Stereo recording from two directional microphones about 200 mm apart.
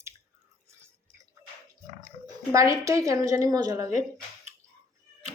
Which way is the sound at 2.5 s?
15° right (ahead or behind).